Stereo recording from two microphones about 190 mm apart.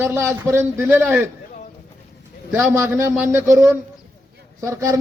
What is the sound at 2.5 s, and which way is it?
Speech, 15° right (ahead or behind).